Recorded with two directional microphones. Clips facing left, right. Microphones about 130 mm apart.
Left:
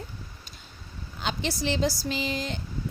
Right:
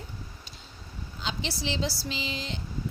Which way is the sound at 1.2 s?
55° left (ahead or behind).